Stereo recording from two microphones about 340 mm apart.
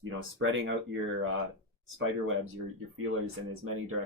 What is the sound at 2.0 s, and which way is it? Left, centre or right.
Speech, right.